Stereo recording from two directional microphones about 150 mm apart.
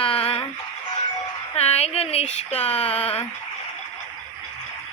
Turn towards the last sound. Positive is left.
turn(degrees=40)  # may be behind; listen again after turning